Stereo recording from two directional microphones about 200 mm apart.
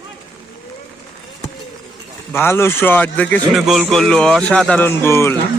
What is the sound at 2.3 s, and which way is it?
A man's voice, 10° left (ahead or behind).